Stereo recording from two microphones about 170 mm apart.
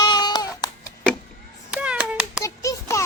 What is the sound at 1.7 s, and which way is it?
Meow, 5° right (ahead or behind).